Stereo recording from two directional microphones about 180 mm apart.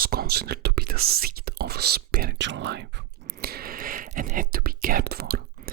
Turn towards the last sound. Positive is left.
turn(degrees=-60)  # may be behind; listen again after turning